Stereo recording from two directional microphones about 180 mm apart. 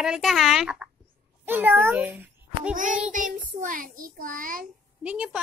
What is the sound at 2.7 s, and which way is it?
A child's voice, 45° right (ahead or behind).